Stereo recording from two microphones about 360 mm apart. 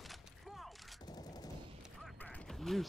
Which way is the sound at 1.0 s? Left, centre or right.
Centre.